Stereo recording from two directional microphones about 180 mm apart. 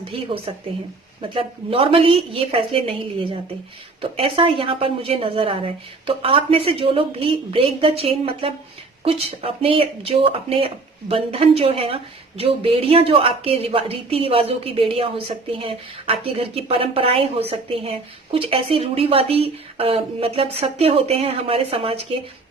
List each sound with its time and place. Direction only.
0.0 s a woman's voice: 30° right (ahead or behind)